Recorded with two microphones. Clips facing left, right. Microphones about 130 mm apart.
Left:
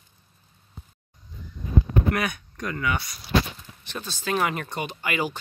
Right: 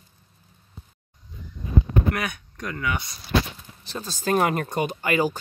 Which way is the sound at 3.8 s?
35° right (ahead or behind).